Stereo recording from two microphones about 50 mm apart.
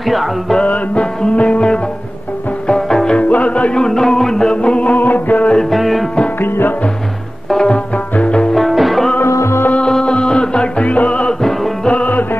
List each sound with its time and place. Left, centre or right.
0.1 s music: centre
0.7 s music: left
3.2 s music: left
3.8 s music: centre
4.6 s music: left
4.9 s music: left
5.7 s music: centre
7.4 s music: centre
7.7 s music: left
8.5 s music: centre
9.3 s music: left
9.8 s music: centre; by 12.3 s left